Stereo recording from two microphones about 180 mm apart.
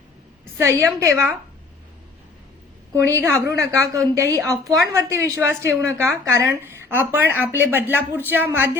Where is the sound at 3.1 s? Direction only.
15° right (ahead or behind).